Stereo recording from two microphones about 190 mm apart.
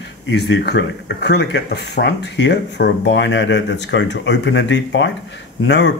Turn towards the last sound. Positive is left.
turn(degrees=70)  # may be behind; listen again after turning